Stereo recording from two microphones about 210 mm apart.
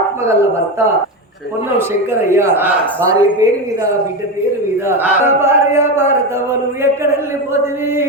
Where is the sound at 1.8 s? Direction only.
10° right (ahead or behind).